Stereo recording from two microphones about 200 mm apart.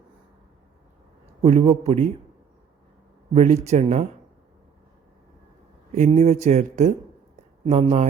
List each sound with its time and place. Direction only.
1.4 s speech: 30° right (ahead or behind)
3.3 s speech: 35° right (ahead or behind)
5.9 s speech: 35° right (ahead or behind)